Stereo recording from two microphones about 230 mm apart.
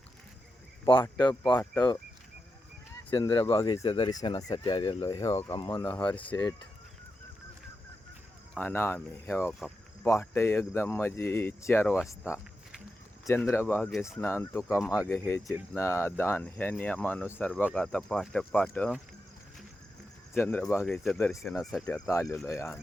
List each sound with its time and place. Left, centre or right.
0.9 s speech: left
1.5 s speech: centre
3.1 s speech: left
8.5 s speech: centre
13.5 s speech: centre
20.3 s speech: centre
21.6 s speech: centre
21.9 s speech: centre